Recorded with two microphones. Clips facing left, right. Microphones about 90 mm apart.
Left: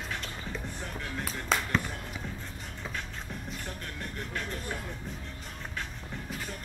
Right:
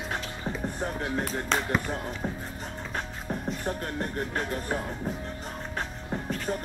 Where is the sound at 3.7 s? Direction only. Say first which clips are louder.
Right 9 dB; 40° right (ahead or behind).